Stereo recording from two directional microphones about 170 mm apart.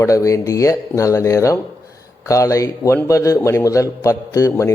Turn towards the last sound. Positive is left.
turn(degrees=15)  # may be behind; listen again after turning